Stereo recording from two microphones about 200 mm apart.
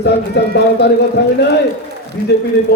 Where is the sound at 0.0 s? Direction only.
60° left (ahead or behind).